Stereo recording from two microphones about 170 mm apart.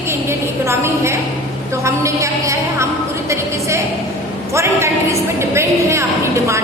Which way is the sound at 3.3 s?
15° right (ahead or behind).